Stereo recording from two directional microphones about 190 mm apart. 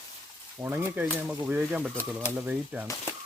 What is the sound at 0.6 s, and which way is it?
Speech, 10° right (ahead or behind).